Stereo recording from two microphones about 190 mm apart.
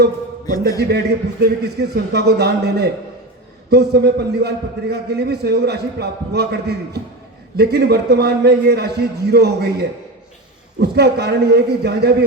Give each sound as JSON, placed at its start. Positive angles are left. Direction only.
{"t": 0.8, "sound": "a man's voice", "side_deg": -60}